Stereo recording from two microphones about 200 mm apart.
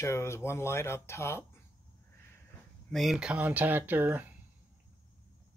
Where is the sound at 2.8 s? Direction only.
Centre (ahead or behind).